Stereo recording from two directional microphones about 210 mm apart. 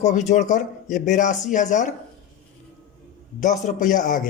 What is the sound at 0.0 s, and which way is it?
A man's voice, 35° left (ahead or behind).